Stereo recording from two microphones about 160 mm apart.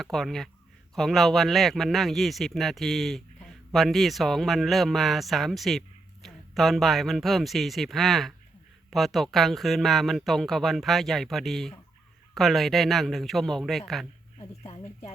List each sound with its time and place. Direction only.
0.0 s speech: centre (ahead or behind)
14.3 s speech: 40° left (ahead or behind)